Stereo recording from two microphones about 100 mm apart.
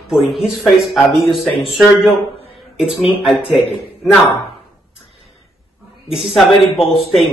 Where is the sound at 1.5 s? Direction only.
70° left (ahead or behind).